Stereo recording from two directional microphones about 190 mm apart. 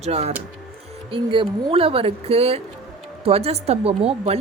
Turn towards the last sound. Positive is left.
turn(degrees=-30)  # may be behind; listen again after turning